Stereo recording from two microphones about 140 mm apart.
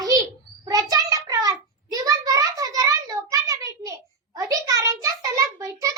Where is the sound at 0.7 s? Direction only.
25° right (ahead or behind).